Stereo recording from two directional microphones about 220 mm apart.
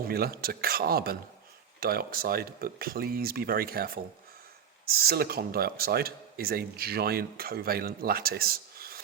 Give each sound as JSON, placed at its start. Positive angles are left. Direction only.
{"t": 0.0, "sound": "speech", "side_deg": -45}